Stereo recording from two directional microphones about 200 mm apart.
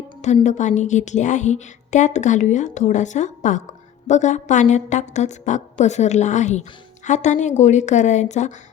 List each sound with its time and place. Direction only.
0.4 s a woman's voice: 35° left (ahead or behind)